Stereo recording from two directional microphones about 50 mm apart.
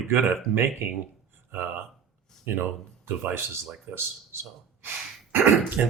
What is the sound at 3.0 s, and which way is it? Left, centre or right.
Speech, right.